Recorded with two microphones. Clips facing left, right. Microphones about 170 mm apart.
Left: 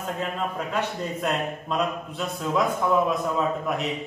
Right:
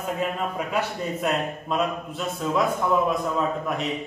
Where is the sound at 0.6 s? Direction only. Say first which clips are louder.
Right 1 dB; 5° right (ahead or behind).